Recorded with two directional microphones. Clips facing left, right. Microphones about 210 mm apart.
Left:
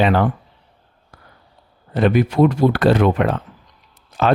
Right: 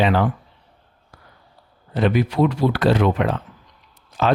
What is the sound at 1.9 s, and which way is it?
Speech, 50° left (ahead or behind).